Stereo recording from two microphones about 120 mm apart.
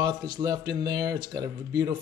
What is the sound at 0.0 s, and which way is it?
Speech, 35° right (ahead or behind).